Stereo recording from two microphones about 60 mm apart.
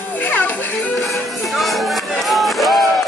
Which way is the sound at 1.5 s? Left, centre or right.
Centre.